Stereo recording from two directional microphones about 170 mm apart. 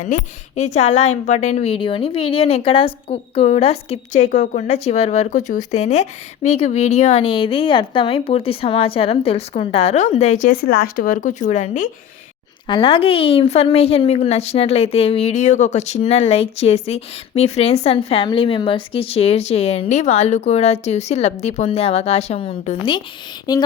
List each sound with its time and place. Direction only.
0.0 s a woman's voice: 45° left (ahead or behind)
12.6 s a woman's voice: 30° left (ahead or behind)
23.5 s a sound: 25° left (ahead or behind)